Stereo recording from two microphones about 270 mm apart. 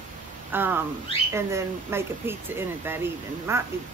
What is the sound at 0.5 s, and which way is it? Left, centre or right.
A woman's voice, centre.